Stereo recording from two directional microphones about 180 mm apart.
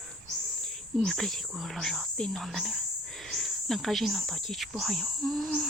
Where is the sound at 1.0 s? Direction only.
Centre (ahead or behind).